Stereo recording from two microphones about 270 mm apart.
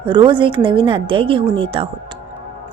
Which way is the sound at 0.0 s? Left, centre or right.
Centre.